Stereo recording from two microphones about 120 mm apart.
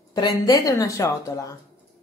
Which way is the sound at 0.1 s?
35° left (ahead or behind).